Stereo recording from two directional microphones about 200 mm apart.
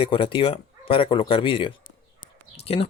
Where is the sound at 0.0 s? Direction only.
25° left (ahead or behind).